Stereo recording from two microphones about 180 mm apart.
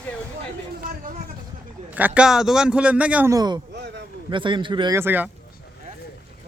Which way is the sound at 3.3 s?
25° right (ahead or behind).